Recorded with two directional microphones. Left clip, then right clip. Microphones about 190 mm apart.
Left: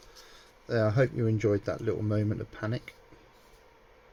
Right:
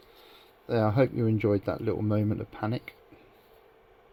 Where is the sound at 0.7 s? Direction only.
40° right (ahead or behind).